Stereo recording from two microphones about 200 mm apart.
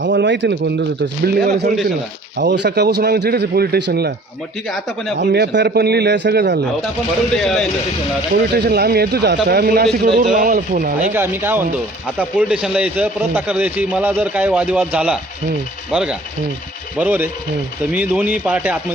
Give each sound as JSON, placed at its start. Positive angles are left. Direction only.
{"t": 0.0, "sound": "a man's voice", "side_deg": -60}
{"t": 1.2, "sound": "a man's voice", "side_deg": -50}
{"t": 2.4, "sound": "a man's voice", "side_deg": -60}
{"t": 5.3, "sound": "a man's voice", "side_deg": -55}
{"t": 7.3, "sound": "speech", "side_deg": 0}
{"t": 8.5, "sound": "a man's voice", "side_deg": -55}
{"t": 11.1, "sound": "a man's voice", "side_deg": -10}